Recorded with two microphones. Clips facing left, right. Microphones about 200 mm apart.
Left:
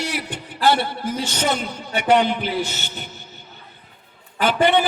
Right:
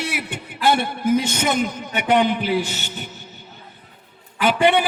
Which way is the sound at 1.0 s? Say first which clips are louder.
Right 7 dB; 35° left (ahead or behind).